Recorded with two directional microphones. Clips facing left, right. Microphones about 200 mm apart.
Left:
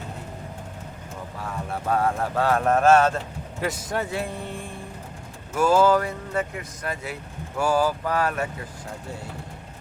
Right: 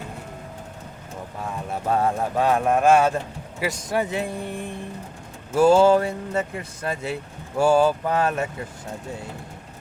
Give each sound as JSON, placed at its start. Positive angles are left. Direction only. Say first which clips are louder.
{"t": 1.9, "sound": "speech", "louder": "right 1 dB", "side_deg": -25}
{"t": 5.5, "sound": "speech", "louder": "right 4 dB", "side_deg": -30}